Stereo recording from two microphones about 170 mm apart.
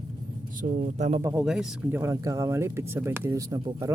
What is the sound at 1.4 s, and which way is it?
Speech, 5° right (ahead or behind).